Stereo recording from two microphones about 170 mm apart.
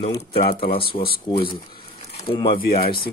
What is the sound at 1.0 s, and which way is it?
Speech, 35° left (ahead or behind).